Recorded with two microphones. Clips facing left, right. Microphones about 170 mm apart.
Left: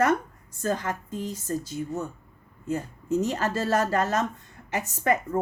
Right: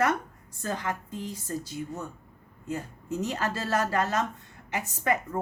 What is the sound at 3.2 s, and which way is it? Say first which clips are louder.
A woman's voice: left 1 dB; 45° left (ahead or behind).